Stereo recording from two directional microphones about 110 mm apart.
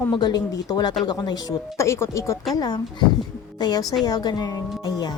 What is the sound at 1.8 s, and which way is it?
Speech, 25° left (ahead or behind).